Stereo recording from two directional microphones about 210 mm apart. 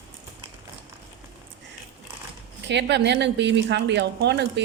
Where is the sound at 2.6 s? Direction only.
55° right (ahead or behind).